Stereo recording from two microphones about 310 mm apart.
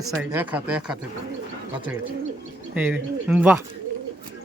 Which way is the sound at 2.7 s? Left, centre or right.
Centre.